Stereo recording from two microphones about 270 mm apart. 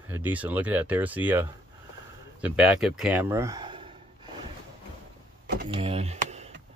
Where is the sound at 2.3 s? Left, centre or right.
Centre.